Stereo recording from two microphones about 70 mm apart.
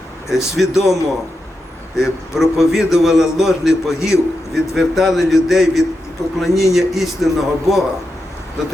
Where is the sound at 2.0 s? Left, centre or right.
Centre.